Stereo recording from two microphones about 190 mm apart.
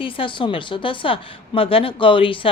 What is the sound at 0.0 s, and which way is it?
A woman's voice, 25° left (ahead or behind).